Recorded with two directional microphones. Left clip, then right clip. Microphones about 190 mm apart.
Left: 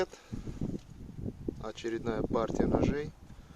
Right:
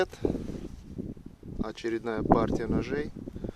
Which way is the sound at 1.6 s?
25° right (ahead or behind).